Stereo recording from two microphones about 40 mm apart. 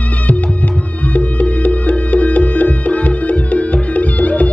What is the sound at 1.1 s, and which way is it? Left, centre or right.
Music, left.